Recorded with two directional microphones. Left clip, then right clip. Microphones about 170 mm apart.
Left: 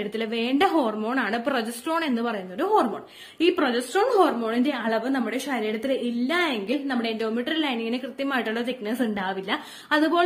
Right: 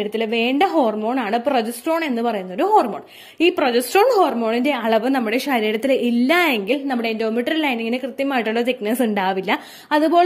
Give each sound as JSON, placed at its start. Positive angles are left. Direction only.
{"t": 0.0, "sound": "a woman's voice", "side_deg": -35}